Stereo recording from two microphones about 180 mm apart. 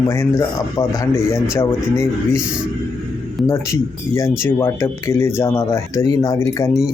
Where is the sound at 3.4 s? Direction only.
15° left (ahead or behind).